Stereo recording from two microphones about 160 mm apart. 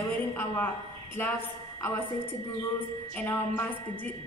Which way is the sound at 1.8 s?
15° left (ahead or behind).